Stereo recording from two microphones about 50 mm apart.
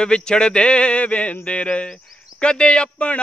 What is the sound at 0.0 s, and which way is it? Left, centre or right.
Speech, centre.